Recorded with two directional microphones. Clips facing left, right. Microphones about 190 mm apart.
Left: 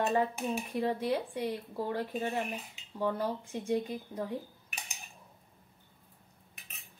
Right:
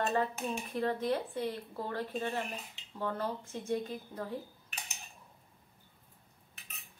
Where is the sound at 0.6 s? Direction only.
10° left (ahead or behind).